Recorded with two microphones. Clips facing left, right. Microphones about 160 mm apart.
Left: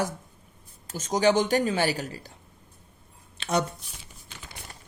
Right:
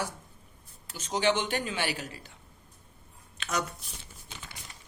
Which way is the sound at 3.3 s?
30° left (ahead or behind).